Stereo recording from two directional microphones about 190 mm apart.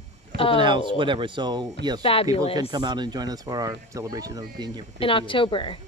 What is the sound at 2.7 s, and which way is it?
A man's voice, 20° right (ahead or behind).